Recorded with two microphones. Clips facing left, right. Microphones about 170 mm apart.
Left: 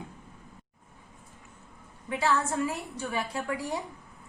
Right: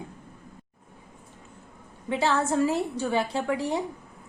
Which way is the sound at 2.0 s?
30° right (ahead or behind).